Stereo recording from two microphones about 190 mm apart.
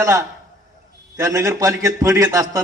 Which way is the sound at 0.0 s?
15° right (ahead or behind).